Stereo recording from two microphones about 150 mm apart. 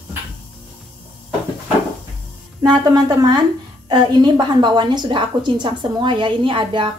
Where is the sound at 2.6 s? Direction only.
25° right (ahead or behind).